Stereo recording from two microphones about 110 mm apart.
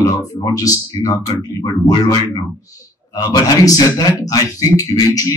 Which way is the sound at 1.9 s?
35° left (ahead or behind).